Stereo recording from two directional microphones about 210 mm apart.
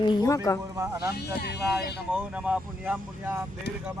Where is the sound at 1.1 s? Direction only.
50° left (ahead or behind).